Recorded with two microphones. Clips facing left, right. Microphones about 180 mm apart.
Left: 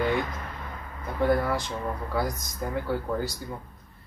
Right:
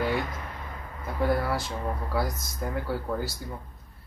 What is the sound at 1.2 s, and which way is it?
Speech, 5° right (ahead or behind).